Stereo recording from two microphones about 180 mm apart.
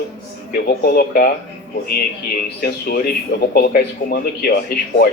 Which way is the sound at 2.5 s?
55° left (ahead or behind).